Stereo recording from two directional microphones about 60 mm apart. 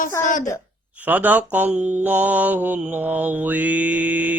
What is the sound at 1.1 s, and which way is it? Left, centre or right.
Mantra, right.